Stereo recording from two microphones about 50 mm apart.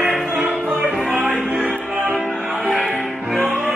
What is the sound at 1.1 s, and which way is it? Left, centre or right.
Music, right.